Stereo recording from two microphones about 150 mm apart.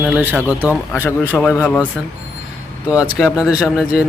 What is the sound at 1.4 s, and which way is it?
Speech, 10° left (ahead or behind).